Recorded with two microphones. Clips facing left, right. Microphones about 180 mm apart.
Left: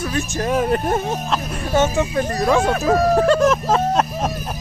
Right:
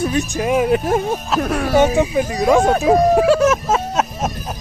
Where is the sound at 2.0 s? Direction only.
10° right (ahead or behind).